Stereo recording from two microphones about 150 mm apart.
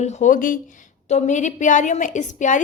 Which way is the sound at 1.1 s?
55° left (ahead or behind).